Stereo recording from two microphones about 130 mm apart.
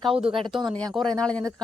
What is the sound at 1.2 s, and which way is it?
Speech, 5° left (ahead or behind).